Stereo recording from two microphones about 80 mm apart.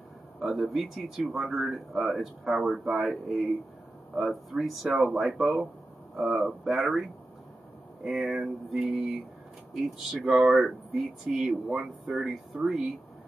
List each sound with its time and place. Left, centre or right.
0.4 s speech: centre